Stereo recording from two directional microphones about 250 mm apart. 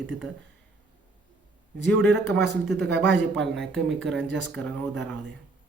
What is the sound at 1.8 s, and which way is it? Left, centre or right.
Speech, centre.